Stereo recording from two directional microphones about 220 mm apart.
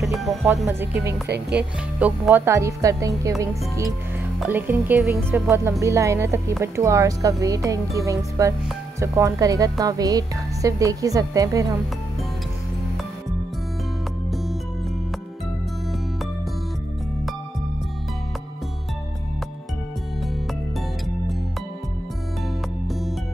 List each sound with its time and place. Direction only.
0.0 s music: centre (ahead or behind)
0.7 s a woman's voice: 10° right (ahead or behind)
1.2 s speech: 50° right (ahead or behind)
1.6 s a woman's voice: 5° right (ahead or behind)
22.8 s music: centre (ahead or behind)